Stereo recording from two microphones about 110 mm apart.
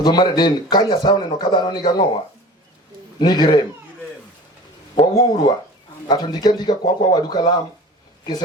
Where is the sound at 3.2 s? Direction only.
40° left (ahead or behind).